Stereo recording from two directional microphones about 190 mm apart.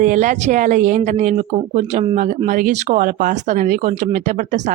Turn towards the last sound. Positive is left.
turn(degrees=-40)  # may be behind; listen again after turning